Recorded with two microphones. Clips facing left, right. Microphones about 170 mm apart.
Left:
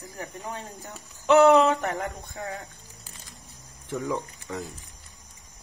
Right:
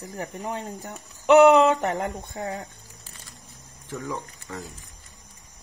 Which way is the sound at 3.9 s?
15° left (ahead or behind).